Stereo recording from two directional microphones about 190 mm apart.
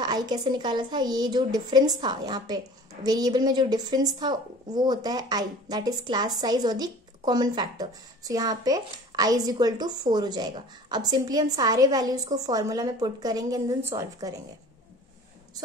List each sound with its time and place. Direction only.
0.0 s a woman's voice: 20° right (ahead or behind)